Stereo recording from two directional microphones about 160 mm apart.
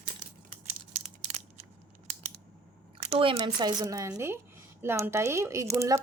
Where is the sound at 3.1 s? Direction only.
40° right (ahead or behind); by 6.0 s 20° right (ahead or behind).